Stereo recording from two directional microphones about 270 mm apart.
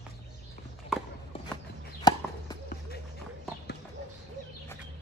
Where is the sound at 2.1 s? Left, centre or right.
Centre.